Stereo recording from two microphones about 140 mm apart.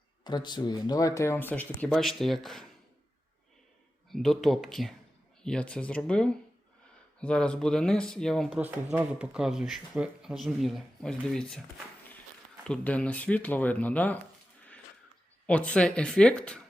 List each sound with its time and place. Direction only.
0.3 s speech: 30° left (ahead or behind); by 2.6 s centre (ahead or behind)
4.1 s speech: centre (ahead or behind)
8.5 s speech: 10° right (ahead or behind)
12.6 s speech: 10° left (ahead or behind)
15.4 s speech: 10° left (ahead or behind)